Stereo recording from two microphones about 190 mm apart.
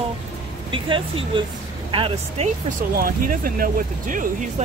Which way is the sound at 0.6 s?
25° right (ahead or behind).